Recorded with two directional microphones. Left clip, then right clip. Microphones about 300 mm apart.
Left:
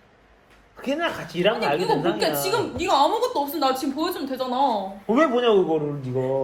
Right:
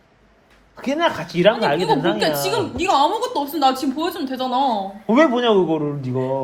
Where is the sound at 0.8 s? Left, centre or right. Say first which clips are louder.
Right 6 dB; right.